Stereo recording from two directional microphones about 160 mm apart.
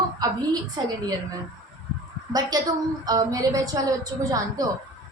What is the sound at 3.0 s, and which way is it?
A woman's voice, 25° right (ahead or behind).